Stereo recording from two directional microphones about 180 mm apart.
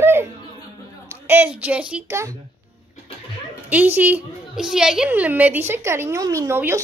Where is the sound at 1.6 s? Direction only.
5° right (ahead or behind).